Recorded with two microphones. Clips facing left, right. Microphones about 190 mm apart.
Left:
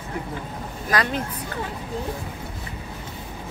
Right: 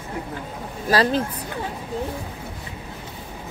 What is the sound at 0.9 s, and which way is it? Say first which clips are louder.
Speech: right 5 dB; 30° right (ahead or behind).